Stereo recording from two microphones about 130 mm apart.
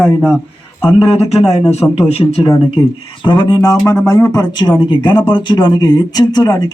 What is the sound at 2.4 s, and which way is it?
Speech, 35° left (ahead or behind).